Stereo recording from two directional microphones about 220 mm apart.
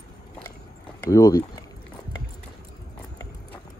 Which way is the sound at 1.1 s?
15° left (ahead or behind).